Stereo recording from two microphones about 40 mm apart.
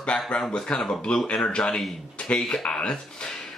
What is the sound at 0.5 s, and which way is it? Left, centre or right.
Speech, centre.